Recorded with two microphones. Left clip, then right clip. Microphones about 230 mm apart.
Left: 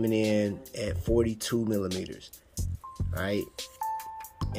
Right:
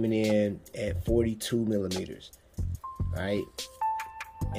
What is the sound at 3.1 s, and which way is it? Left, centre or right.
Music, centre.